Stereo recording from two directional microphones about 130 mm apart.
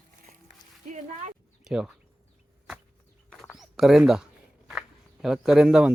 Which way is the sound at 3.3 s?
Centre (ahead or behind).